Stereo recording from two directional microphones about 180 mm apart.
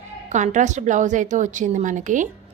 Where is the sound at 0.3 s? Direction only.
40° right (ahead or behind).